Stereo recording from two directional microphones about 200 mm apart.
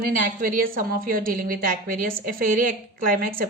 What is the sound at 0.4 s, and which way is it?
A woman's voice, 45° right (ahead or behind).